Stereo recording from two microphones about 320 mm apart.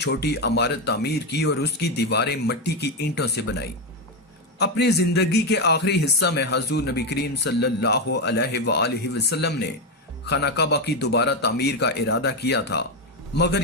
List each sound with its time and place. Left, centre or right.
0.0 s a man's voice: left